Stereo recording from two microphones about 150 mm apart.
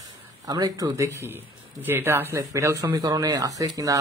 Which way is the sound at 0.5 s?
25° right (ahead or behind).